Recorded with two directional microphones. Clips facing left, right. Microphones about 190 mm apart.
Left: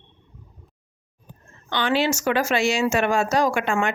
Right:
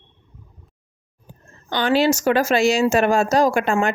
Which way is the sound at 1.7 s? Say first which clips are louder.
Right 4 dB; 40° right (ahead or behind).